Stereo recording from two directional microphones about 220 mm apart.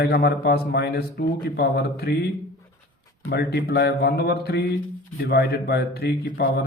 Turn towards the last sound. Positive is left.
turn(degrees=45)  # may be behind; listen again after turning